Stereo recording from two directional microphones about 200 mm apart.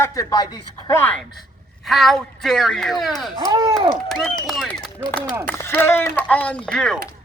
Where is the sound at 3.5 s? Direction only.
20° right (ahead or behind).